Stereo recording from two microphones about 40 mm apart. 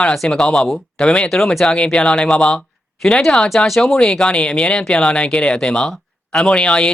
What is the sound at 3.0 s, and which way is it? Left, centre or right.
Speech, centre.